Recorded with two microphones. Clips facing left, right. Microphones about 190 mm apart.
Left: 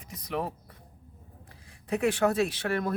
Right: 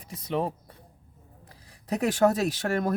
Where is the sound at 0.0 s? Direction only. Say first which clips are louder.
Right 4 dB; 30° right (ahead or behind).